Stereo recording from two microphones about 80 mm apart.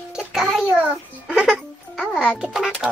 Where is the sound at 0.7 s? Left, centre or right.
Centre.